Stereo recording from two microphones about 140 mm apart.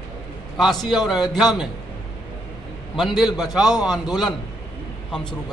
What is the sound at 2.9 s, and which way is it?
A man's voice, centre (ahead or behind).